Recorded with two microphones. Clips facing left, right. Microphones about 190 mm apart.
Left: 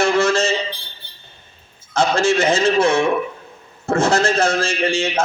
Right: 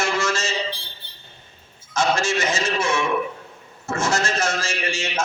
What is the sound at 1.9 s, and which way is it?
A man's voice, 60° left (ahead or behind).